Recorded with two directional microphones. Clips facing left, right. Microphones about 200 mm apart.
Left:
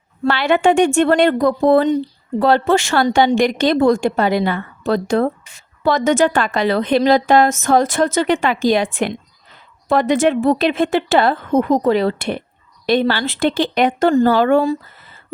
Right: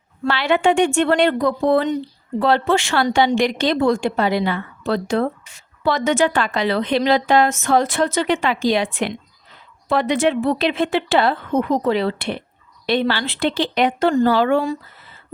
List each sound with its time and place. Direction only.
0.3 s a woman's voice: 50° left (ahead or behind)